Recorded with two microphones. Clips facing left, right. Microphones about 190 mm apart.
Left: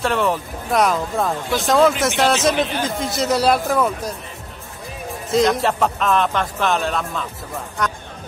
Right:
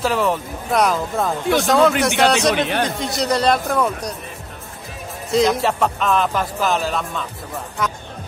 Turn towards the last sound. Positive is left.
turn(degrees=0)  # may be behind; listen again after turning